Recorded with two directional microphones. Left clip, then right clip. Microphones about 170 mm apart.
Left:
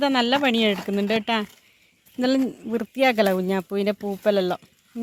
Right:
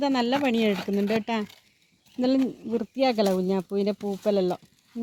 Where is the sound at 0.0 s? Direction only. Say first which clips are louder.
Left 4 dB; centre (ahead or behind).